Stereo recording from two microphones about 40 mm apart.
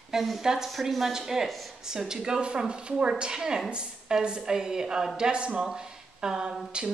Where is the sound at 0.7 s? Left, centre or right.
Centre.